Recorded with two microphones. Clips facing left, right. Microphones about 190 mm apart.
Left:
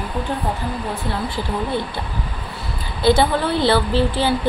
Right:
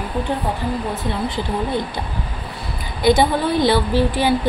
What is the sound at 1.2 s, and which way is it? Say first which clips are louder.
Speech: right 1 dB; 20° right (ahead or behind).